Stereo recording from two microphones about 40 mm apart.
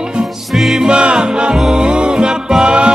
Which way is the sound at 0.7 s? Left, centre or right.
Right.